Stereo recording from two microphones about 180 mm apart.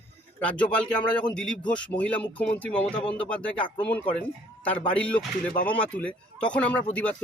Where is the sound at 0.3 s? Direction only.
5° left (ahead or behind).